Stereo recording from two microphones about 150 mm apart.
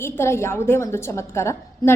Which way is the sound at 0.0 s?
15° left (ahead or behind).